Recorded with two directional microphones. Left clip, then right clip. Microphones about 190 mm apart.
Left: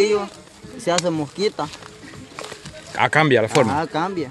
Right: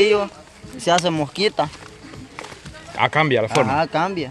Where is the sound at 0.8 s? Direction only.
35° right (ahead or behind).